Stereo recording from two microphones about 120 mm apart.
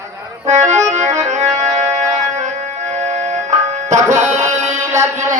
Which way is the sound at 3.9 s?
85° right.